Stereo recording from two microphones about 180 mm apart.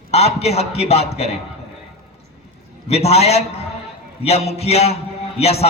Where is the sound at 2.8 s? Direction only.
35° left (ahead or behind).